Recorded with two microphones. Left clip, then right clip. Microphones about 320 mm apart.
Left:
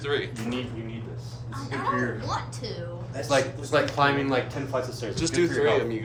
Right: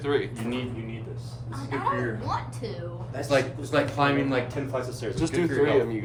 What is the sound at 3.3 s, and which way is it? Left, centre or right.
Speech, centre.